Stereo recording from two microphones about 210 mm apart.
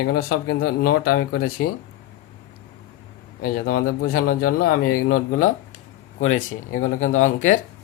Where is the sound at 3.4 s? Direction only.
45° left (ahead or behind).